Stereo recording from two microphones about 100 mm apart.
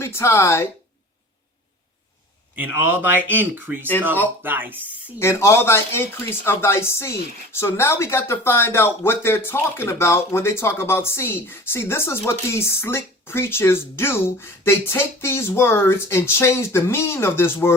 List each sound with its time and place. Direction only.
0.0 s speech: 25° left (ahead or behind)
2.6 s speech: 20° right (ahead or behind)
5.2 s speech: 25° left (ahead or behind)